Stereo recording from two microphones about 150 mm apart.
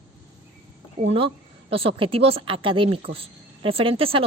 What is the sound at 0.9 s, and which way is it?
Speech, 45° right (ahead or behind).